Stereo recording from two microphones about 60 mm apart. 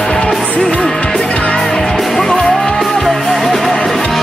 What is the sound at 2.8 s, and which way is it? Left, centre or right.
Music, centre.